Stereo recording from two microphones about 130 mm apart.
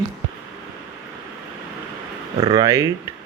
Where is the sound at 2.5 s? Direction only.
30° right (ahead or behind).